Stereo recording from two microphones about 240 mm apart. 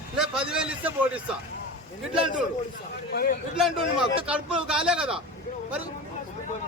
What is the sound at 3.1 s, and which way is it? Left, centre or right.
Speech, left.